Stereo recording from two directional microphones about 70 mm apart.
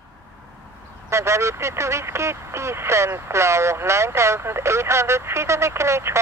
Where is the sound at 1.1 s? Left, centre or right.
Right.